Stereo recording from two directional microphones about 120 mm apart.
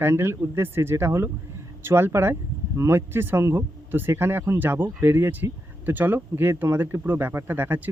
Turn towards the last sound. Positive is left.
turn(degrees=-15)  # may be behind; listen again after turning